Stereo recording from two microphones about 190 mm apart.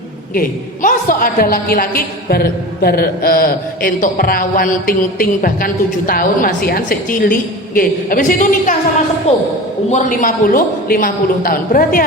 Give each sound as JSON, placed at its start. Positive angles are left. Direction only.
{"t": 0.3, "sound": "a woman's voice", "side_deg": 45}
{"t": 9.3, "sound": "a man's voice", "side_deg": 35}